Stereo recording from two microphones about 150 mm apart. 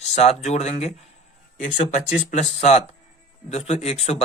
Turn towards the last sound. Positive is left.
turn(degrees=45)  # may be behind; listen again after turning